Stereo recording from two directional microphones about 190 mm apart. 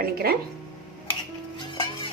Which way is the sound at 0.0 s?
55° right (ahead or behind).